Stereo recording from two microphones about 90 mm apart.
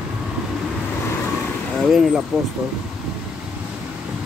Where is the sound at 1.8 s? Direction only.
5° right (ahead or behind).